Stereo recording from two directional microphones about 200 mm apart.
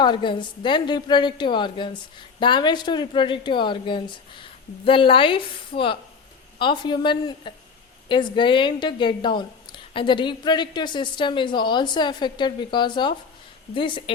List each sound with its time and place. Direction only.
0.0 s a woman's voice: 25° left (ahead or behind)